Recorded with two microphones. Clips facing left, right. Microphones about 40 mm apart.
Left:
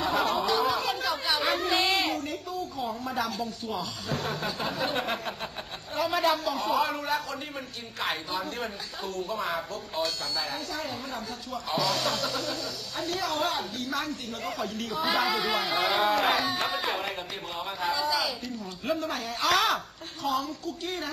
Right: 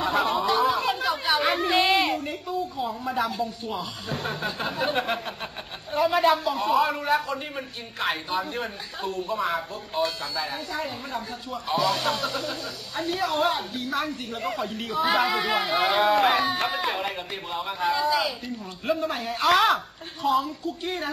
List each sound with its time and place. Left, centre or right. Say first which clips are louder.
0.0 s a sound: right 3 dB; centre
2.9 s speech: right 3 dB; centre
3.3 s speech: right 3 dB; centre
7.0 s speech: right 5 dB; centre
9.3 s speech: right 5 dB; centre
10.0 s speech: right 4 dB; centre
15.0 s speech: right 4 dB; centre